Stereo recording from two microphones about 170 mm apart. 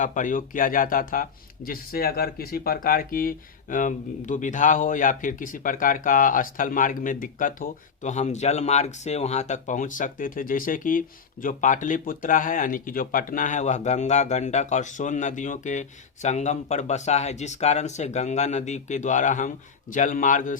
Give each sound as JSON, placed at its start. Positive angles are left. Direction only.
{"t": 0.0, "sound": "speech", "side_deg": 50}